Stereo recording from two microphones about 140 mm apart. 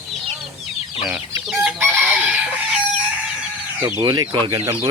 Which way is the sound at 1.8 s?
10° right (ahead or behind).